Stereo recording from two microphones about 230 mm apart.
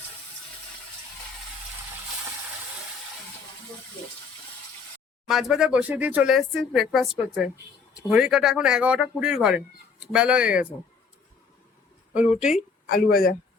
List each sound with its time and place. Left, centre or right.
5.3 s speech: centre
12.1 s speech: centre
12.9 s speech: left